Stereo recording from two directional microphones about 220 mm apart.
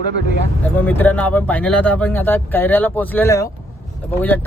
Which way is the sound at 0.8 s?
5° left (ahead or behind).